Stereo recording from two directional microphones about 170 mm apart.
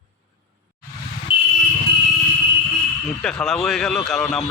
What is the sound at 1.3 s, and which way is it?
Vehicle, 30° left (ahead or behind).